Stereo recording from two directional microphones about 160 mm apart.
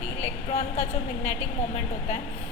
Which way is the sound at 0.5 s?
45° left (ahead or behind).